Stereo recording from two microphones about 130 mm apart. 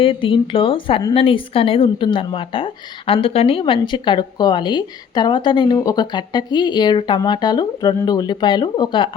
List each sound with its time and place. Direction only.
0.0 s a woman's voice: 45° left (ahead or behind)